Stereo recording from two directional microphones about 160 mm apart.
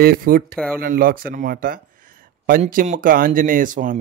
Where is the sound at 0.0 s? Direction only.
65° right (ahead or behind).